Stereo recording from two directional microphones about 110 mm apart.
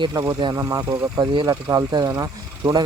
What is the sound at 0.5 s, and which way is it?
Speech, 25° right (ahead or behind).